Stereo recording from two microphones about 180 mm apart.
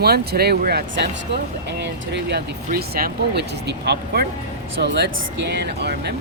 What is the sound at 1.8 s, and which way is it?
Speech, 75° right (ahead or behind).